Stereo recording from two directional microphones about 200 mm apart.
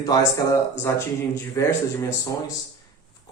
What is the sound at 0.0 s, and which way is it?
Speech, 15° left (ahead or behind).